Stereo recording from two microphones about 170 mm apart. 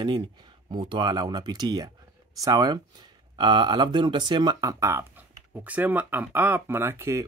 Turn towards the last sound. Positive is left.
turn(degrees=-15)  # may be behind; listen again after turning